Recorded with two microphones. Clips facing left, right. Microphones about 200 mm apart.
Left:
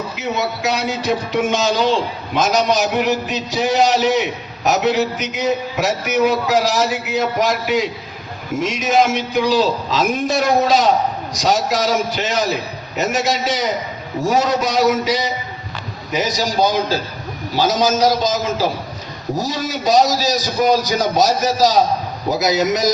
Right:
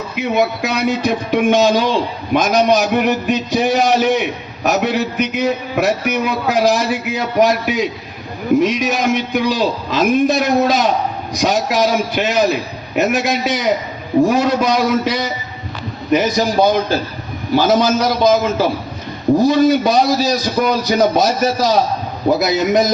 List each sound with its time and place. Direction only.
0.2 s a man's voice: 55° right (ahead or behind)